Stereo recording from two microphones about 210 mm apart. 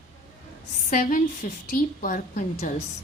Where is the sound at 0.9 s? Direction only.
40° left (ahead or behind).